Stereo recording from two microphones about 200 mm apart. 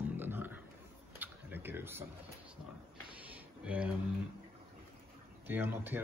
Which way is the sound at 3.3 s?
5° right (ahead or behind).